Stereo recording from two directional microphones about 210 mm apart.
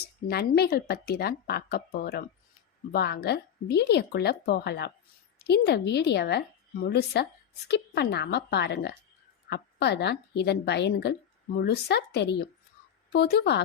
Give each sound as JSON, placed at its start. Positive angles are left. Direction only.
{"t": 0.3, "sound": "speech", "side_deg": 50}